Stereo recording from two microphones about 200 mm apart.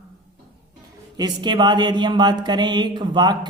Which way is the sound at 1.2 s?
20° right (ahead or behind).